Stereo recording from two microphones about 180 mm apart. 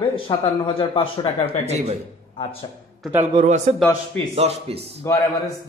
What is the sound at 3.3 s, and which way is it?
A man's voice, 40° right (ahead or behind).